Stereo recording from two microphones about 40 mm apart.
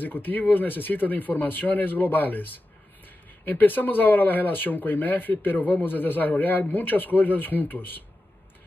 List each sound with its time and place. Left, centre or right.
0.0 s speech: left